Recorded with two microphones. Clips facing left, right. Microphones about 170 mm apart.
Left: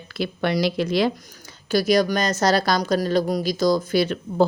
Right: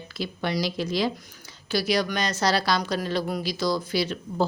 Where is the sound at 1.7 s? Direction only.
45° left (ahead or behind).